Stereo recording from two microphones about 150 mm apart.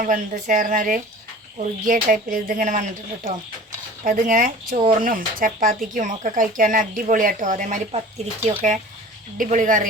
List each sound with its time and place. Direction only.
0.0 s speech: 65° right (ahead or behind)